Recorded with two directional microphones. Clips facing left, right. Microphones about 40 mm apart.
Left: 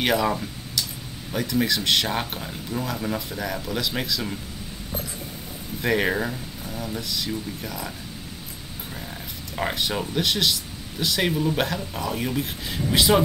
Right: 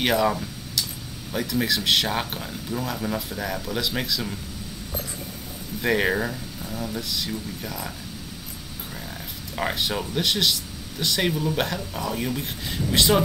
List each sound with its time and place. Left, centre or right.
0.0 s speech: centre
4.9 s a sound: left
5.8 s speech: centre
8.9 s speech: centre